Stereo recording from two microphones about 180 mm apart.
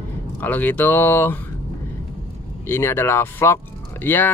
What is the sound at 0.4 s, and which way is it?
Speech, 10° left (ahead or behind).